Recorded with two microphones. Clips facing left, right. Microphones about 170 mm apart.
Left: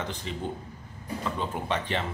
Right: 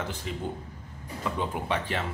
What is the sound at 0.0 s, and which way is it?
Speech, 5° right (ahead or behind).